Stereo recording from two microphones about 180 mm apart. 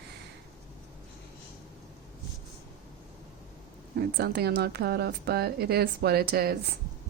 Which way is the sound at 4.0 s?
65° right (ahead or behind).